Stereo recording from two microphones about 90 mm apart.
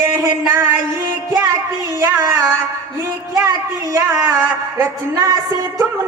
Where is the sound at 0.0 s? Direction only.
35° right (ahead or behind).